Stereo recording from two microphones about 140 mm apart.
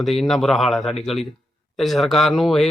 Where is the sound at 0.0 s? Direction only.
Centre (ahead or behind).